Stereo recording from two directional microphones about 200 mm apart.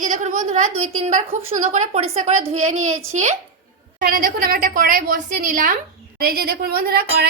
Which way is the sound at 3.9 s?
45° right (ahead or behind).